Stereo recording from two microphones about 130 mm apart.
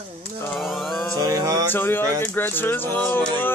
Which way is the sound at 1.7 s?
15° left (ahead or behind).